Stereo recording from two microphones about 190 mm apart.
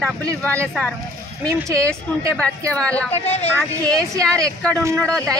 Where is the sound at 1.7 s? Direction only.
15° right (ahead or behind).